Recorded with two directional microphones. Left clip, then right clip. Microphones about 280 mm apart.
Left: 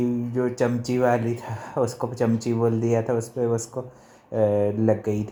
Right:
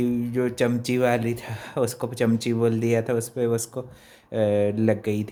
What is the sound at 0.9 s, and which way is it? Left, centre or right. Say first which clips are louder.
Speech: left 2 dB; centre.